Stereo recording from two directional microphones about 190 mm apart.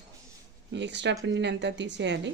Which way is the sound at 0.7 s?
65° right (ahead or behind).